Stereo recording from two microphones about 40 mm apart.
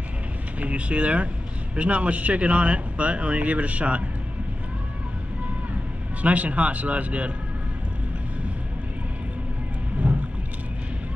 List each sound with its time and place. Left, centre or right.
0.6 s speech: right
6.2 s speech: right
10.0 s a sound: right